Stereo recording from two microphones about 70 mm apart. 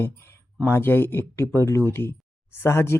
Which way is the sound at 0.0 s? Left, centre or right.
Left.